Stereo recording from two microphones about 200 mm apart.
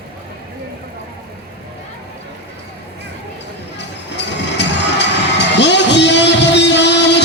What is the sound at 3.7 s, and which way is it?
Music, 60° left (ahead or behind).